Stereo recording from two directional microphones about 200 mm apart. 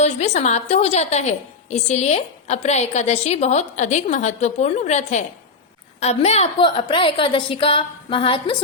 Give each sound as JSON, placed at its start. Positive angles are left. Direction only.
{"t": 0.0, "sound": "a woman's voice", "side_deg": 35}